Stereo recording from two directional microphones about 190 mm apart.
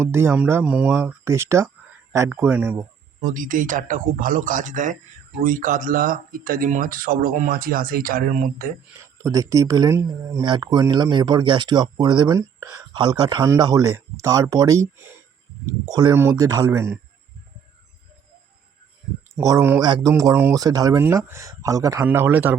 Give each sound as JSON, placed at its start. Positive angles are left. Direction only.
{"t": 0.0, "sound": "speech", "side_deg": -15}
{"t": 3.2, "sound": "speech", "side_deg": -45}
{"t": 9.0, "sound": "speech", "side_deg": -15}
{"t": 19.4, "sound": "speech", "side_deg": -15}